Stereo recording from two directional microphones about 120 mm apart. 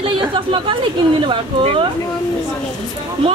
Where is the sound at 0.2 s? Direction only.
45° right (ahead or behind).